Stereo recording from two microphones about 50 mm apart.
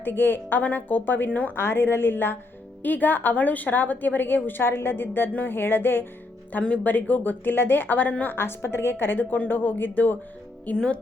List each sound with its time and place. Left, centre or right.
0.0 s a woman's voice: left
1.5 s a woman's voice: left
6.5 s a woman's voice: left